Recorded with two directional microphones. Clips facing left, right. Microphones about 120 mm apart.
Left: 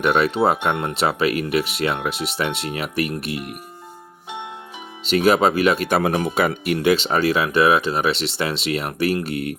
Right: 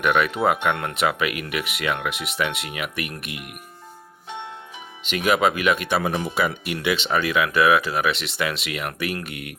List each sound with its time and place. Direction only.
0.0 s speech: 35° left (ahead or behind)
5.0 s speech: 35° left (ahead or behind)
6.0 s speech: 55° left (ahead or behind); by 9.6 s 35° left (ahead or behind)